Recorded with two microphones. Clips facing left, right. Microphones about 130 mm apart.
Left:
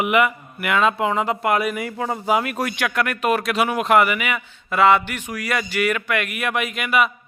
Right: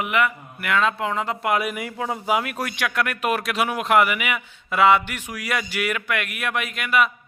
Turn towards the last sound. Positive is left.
turn(degrees=5)  # may be behind; listen again after turning